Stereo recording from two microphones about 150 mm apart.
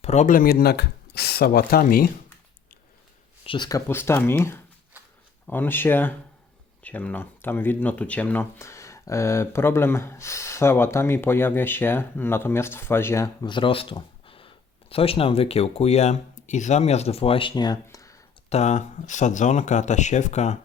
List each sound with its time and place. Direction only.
0.0 s speech: 50° left (ahead or behind); by 2.0 s 75° left (ahead or behind)
3.4 s speech: 35° left (ahead or behind)
3.7 s speech: 20° left (ahead or behind); by 17.5 s 40° left (ahead or behind)
17.5 s speech: 30° left (ahead or behind)
17.8 s a sound: 20° left (ahead or behind)
18.4 s speech: 50° left (ahead or behind)